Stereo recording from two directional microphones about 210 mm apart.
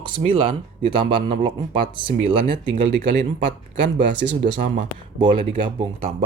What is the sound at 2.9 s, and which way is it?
Speech, 50° right (ahead or behind).